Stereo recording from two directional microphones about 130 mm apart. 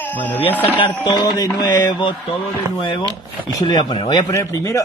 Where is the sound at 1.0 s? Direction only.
30° left (ahead or behind).